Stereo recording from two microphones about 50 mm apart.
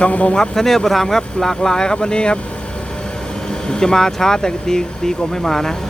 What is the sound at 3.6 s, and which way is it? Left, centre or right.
Speech, centre.